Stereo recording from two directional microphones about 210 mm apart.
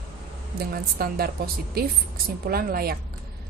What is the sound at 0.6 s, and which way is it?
Speech, 45° right (ahead or behind).